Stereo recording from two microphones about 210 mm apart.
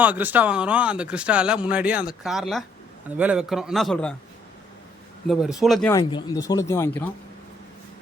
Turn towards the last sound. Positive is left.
turn(degrees=10)  # may be behind; listen again after turning